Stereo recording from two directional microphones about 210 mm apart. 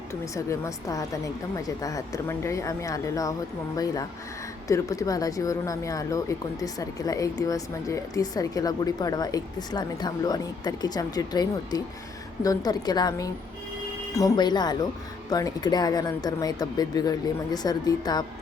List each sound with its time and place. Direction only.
0.1 s speech: 15° left (ahead or behind)
4.7 s speech: 15° left (ahead or behind)